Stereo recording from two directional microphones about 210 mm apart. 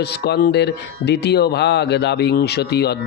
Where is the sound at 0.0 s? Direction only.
50° left (ahead or behind).